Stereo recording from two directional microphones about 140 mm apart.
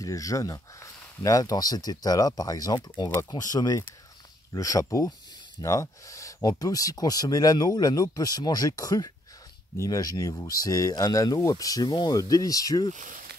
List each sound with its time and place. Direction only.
0.0 s speech: 25° left (ahead or behind)
12.9 s speech: 65° right (ahead or behind)